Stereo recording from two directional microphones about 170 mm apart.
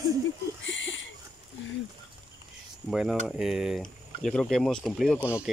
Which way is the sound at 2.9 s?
Centre (ahead or behind).